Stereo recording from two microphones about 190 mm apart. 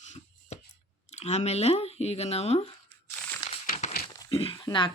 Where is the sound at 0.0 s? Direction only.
40° left (ahead or behind).